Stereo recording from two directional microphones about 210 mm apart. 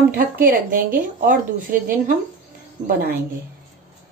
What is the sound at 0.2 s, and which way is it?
Speech, 45° right (ahead or behind).